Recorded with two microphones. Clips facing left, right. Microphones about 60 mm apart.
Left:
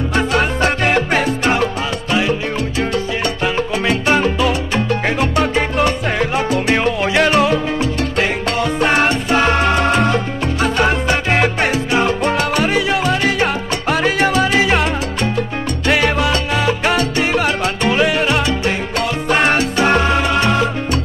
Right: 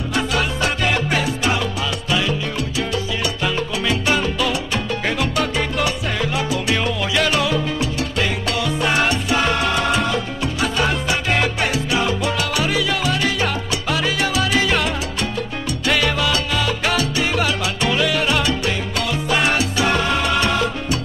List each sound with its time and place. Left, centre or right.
0.1 s salsa music: left
4.5 s salsa music: left
15.9 s salsa music: left
18.9 s music: left
20.1 s music: left